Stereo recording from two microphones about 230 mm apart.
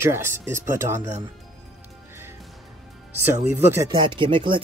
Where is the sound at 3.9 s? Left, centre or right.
Right.